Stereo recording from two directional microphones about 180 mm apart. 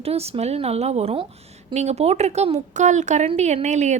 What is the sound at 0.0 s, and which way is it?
A woman's voice, 35° right (ahead or behind).